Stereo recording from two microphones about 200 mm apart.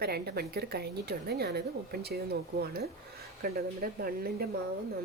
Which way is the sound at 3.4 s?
50° right (ahead or behind).